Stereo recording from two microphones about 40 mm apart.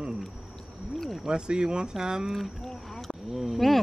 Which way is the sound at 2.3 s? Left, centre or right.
Centre.